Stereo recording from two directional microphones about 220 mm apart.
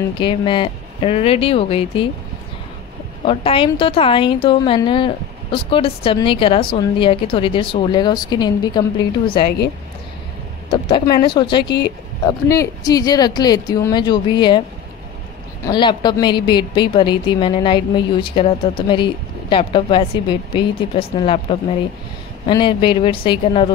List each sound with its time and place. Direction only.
0.2 s a woman's voice: 20° left (ahead or behind)
3.3 s a woman's voice: 25° left (ahead or behind)
10.7 s a woman's voice: 25° left (ahead or behind)
15.6 s a woman's voice: 20° left (ahead or behind)